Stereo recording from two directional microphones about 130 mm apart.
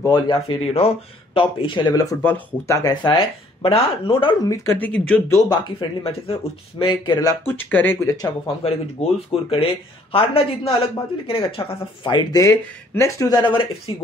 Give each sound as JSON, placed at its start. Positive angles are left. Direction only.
{"t": 0.1, "sound": "speech", "side_deg": 40}
{"t": 2.2, "sound": "speech", "side_deg": 15}
{"t": 4.5, "sound": "speech", "side_deg": 15}
{"t": 5.5, "sound": "speech", "side_deg": 35}
{"t": 7.4, "sound": "speech", "side_deg": 15}
{"t": 8.6, "sound": "speech", "side_deg": 50}